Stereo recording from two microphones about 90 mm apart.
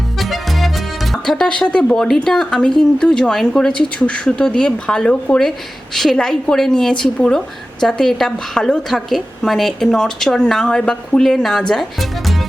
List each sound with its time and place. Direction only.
0.2 s music: centre (ahead or behind)
1.1 s speech: 5° left (ahead or behind)